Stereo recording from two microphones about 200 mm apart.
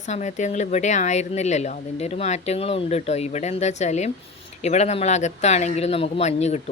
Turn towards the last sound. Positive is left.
turn(degrees=35)  # may be behind; listen again after turning